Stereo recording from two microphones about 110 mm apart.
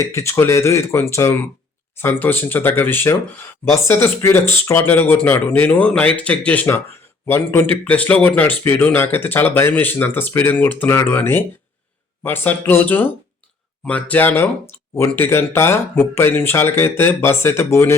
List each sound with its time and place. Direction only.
0.0 s speech: 25° left (ahead or behind)